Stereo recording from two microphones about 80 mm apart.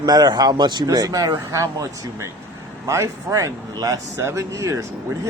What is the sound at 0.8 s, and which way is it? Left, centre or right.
Speech, right.